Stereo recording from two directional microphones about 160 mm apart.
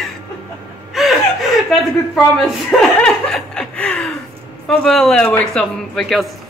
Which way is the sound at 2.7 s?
5° left (ahead or behind).